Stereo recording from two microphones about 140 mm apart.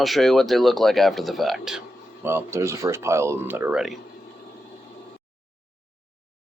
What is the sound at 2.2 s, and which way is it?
Speech, 15° right (ahead or behind).